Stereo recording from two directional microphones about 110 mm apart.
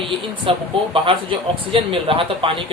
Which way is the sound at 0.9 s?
55° right (ahead or behind).